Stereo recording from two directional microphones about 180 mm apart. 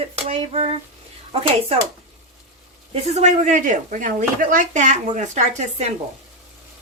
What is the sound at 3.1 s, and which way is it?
Speech, 40° right (ahead or behind).